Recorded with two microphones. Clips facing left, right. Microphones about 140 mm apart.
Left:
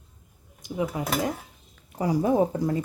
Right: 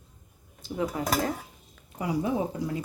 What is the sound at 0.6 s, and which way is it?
Speech, 15° left (ahead or behind).